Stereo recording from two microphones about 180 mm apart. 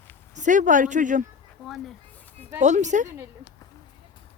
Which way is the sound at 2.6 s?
40° right (ahead or behind).